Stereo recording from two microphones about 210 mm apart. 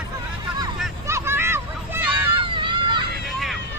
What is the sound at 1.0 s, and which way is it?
Hubbub, 10° right (ahead or behind).